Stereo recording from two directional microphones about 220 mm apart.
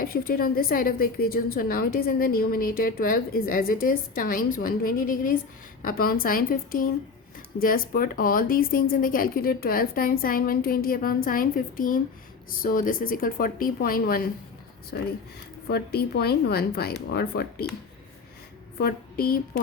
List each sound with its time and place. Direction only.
0.0 s a woman's voice: 40° left (ahead or behind)
15.7 s speech: 45° left (ahead or behind)
18.8 s speech: 45° left (ahead or behind)